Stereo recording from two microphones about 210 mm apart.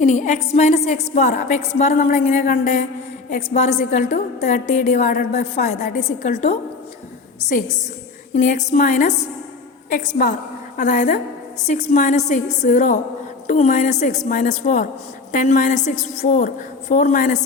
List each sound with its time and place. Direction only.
0.0 s a woman's voice: 35° left (ahead or behind)
8.4 s a woman's voice: 35° left (ahead or behind)